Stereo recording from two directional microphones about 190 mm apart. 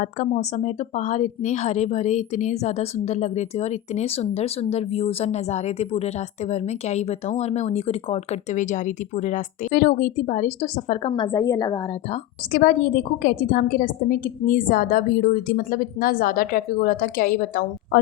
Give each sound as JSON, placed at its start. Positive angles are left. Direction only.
{"t": 0.0, "sound": "a woman's voice", "side_deg": 40}
{"t": 11.1, "sound": "a woman's voice", "side_deg": 20}
{"t": 12.5, "sound": "a woman's voice", "side_deg": 50}